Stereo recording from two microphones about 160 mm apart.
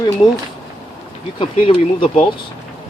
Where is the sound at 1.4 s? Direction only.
35° left (ahead or behind).